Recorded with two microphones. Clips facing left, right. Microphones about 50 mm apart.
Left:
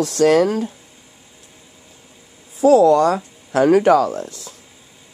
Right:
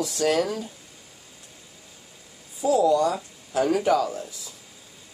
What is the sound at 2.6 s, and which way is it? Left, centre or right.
Speech, left.